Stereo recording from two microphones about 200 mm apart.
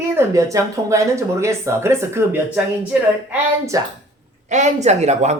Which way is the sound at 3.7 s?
15° right (ahead or behind).